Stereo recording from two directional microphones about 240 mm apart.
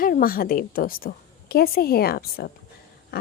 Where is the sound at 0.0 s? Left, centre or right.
Left.